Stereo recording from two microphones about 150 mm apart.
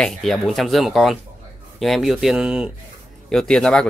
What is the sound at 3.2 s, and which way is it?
Speech, 5° left (ahead or behind).